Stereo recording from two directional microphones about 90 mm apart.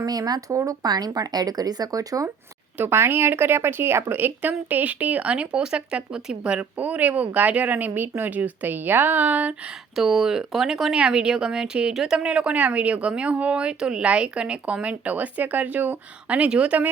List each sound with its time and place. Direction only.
0.0 s speech: 45° right (ahead or behind)
2.7 s speech: 25° right (ahead or behind)
9.9 s speech: 5° right (ahead or behind)